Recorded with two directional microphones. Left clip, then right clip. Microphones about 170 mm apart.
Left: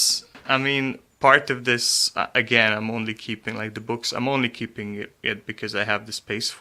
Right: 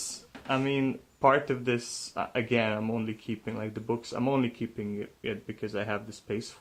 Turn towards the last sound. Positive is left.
turn(degrees=10)  # may be behind; listen again after turning